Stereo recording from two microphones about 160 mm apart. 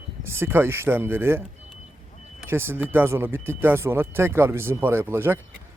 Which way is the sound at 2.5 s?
15° right (ahead or behind).